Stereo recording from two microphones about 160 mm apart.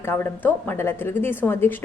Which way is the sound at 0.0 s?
15° left (ahead or behind).